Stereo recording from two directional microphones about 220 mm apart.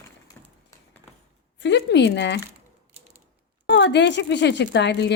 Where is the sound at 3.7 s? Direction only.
55° left (ahead or behind).